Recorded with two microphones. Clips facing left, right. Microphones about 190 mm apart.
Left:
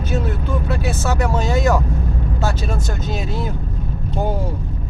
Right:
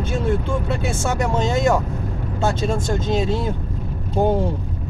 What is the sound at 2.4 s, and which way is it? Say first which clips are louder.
Speech: right 4 dB; 25° right (ahead or behind).